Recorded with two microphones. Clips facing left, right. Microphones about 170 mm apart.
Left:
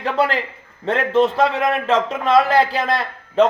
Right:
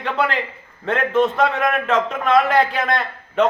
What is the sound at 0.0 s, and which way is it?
Speech, 35° left (ahead or behind).